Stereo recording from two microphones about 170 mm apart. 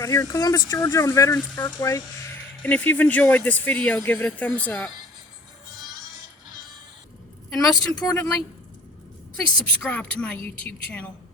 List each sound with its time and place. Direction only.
0.0 s speech: 20° left (ahead or behind)
2.6 s speech: 10° left (ahead or behind)
8.0 s speech: 20° left (ahead or behind)
9.3 s speech: 5° left (ahead or behind)